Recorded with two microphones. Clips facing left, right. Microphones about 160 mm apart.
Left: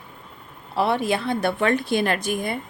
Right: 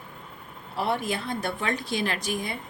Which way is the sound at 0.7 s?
80° left.